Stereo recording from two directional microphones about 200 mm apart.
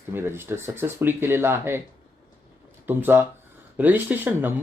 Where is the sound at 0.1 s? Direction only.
10° right (ahead or behind).